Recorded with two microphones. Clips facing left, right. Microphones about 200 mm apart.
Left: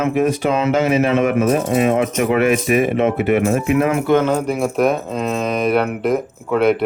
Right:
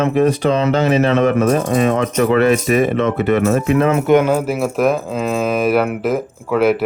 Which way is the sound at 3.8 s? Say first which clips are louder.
Right 4 dB; 25° right (ahead or behind).